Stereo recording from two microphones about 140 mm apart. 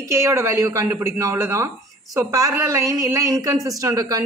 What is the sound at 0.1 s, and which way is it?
Speech, 20° right (ahead or behind).